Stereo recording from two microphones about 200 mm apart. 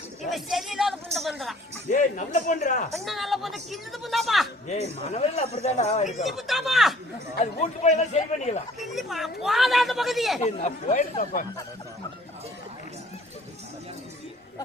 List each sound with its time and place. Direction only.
0.3 s speech: centre (ahead or behind)
1.9 s speech: 40° left (ahead or behind)
2.9 s speech: centre (ahead or behind)
4.7 s speech: 35° left (ahead or behind)
6.2 s speech: centre (ahead or behind)
7.6 s speech: 35° left (ahead or behind)
8.8 s speech: centre (ahead or behind)
10.4 s speech: 35° left (ahead or behind)